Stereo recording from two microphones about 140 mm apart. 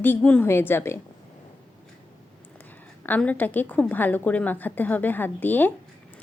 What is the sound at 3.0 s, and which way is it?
A woman's voice, 10° left (ahead or behind).